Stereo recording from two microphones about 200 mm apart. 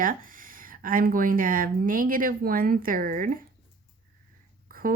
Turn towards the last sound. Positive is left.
turn(degrees=-45)  # may be behind; listen again after turning